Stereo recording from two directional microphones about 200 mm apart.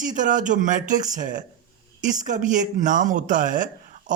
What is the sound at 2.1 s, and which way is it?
Speech, 40° right (ahead or behind).